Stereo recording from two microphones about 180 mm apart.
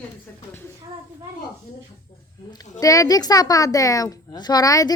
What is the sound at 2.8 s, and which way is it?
A woman's voice, 20° left (ahead or behind).